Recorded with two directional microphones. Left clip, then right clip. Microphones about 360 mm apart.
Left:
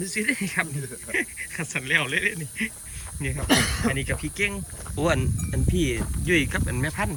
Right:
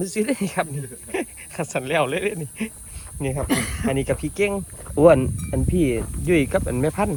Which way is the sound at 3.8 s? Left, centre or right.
Centre.